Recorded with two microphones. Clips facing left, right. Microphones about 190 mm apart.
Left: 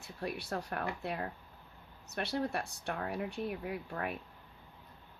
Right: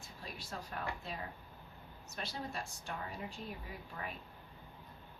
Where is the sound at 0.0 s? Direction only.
65° left (ahead or behind).